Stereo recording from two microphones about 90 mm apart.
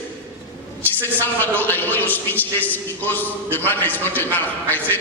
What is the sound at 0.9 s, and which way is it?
A man's voice, 20° left (ahead or behind).